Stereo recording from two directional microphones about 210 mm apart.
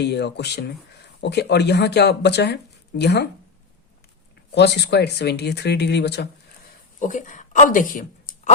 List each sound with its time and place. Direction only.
0.0 s speech: 55° left (ahead or behind)
4.5 s speech: 55° left (ahead or behind)
7.0 s speech: 35° left (ahead or behind)